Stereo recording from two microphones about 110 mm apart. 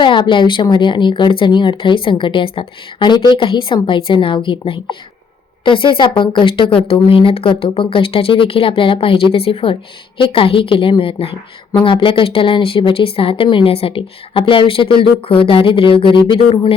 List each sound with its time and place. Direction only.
0.0 s speech: 45° left (ahead or behind)